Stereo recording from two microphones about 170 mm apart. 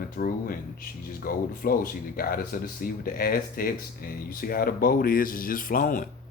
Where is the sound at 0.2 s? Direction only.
55° left (ahead or behind).